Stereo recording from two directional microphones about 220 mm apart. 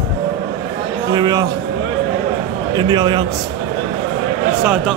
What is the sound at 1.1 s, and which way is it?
Speech, 20° right (ahead or behind).